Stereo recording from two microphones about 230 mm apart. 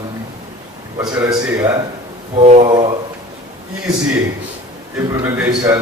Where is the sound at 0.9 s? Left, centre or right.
Centre.